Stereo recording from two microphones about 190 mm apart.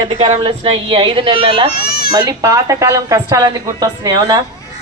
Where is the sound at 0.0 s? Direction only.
30° right (ahead or behind).